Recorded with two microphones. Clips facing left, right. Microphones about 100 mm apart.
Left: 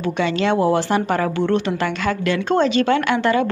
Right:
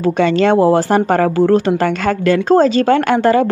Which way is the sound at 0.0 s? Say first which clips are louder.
Right 7 dB; 45° right (ahead or behind).